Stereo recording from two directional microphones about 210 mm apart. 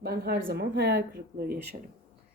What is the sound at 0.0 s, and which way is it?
Speech, 50° right (ahead or behind).